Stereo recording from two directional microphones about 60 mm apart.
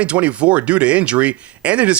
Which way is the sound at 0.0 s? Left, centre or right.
Right.